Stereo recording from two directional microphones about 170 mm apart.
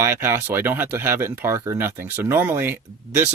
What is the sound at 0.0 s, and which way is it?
Speech, 15° right (ahead or behind).